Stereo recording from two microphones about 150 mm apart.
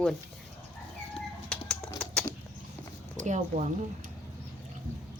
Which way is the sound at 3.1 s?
60° right (ahead or behind).